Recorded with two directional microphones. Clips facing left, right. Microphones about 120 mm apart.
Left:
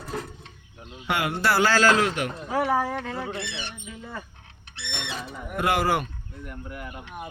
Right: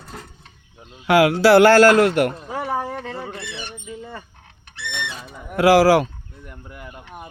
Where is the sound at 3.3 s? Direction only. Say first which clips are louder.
Even; 45° right (ahead or behind).